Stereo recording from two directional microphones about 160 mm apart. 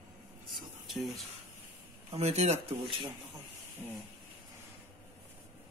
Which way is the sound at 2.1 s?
40° right (ahead or behind).